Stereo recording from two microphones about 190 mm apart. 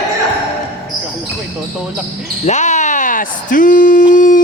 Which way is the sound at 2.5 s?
40° left (ahead or behind).